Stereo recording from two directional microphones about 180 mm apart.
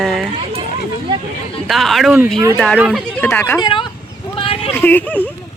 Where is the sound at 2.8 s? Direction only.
5° right (ahead or behind).